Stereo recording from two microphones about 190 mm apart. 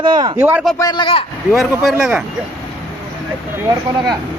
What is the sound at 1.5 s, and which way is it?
Speech, centre (ahead or behind).